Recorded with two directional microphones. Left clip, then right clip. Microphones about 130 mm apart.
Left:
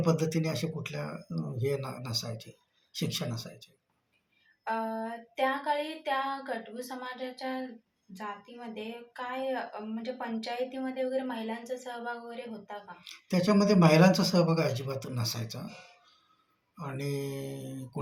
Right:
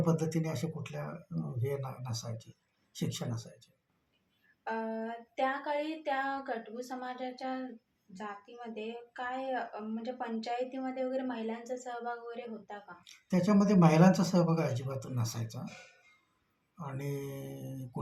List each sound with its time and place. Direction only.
0.0 s speech: 15° left (ahead or behind)
4.6 s speech: 15° right (ahead or behind)
13.1 s speech: 15° left (ahead or behind)
16.8 s speech: 15° left (ahead or behind)